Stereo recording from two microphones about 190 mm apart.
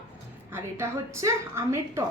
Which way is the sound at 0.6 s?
15° right (ahead or behind).